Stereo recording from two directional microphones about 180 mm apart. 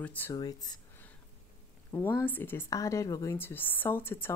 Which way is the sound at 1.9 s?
15° left (ahead or behind).